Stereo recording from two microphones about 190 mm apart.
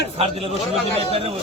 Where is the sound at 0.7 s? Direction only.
30° right (ahead or behind).